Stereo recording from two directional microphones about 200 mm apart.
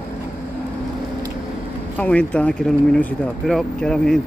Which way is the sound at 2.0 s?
5° left (ahead or behind).